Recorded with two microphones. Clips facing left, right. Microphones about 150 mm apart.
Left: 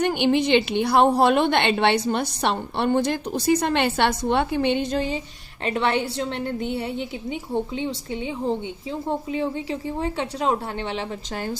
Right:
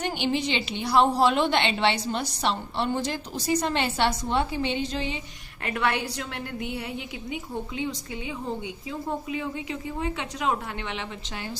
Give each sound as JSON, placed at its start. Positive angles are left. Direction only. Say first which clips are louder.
{"t": 0.0, "sound": "a woman's voice", "louder": "left 7 dB", "side_deg": 55}
{"t": 5.6, "sound": "a woman's voice", "louder": "left 4 dB", "side_deg": 25}